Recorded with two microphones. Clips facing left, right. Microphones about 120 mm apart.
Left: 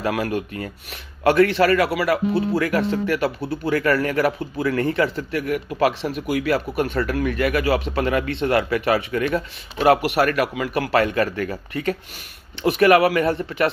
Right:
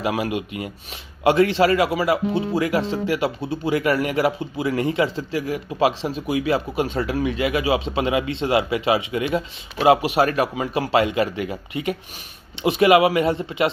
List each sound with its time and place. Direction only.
0.0 s a man's voice: 20° right (ahead or behind)